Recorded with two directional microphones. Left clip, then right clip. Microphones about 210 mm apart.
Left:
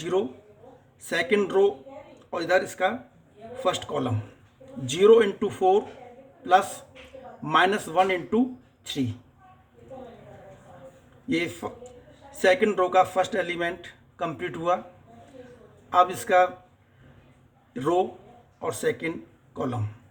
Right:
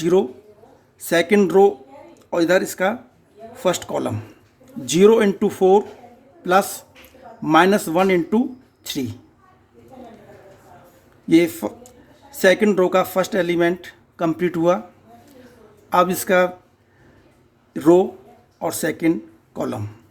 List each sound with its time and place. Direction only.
0.0 s a woman's voice: 50° right (ahead or behind)
11.6 s speech: 45° right (ahead or behind)
15.9 s speech: 50° right (ahead or behind)
17.7 s a man's voice: 45° right (ahead or behind)